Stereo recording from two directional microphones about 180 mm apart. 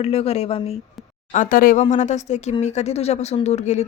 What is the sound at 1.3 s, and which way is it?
Speech, 45° left (ahead or behind).